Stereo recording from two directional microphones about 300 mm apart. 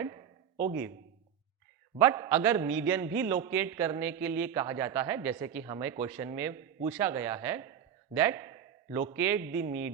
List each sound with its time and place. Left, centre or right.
0.5 s speech: right
2.0 s a man's voice: centre